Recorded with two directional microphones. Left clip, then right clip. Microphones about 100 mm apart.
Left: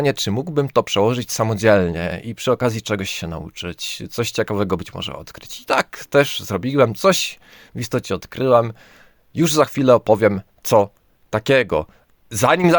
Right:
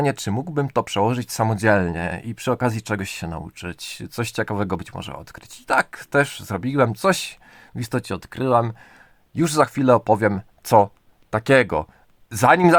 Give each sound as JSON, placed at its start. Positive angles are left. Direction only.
{"t": 0.0, "sound": "speech", "side_deg": 25}